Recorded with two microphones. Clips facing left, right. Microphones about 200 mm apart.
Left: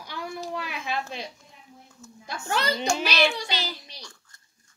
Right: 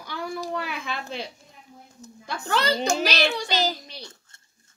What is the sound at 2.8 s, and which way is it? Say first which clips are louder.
Speech: right 1 dB; 40° right (ahead or behind).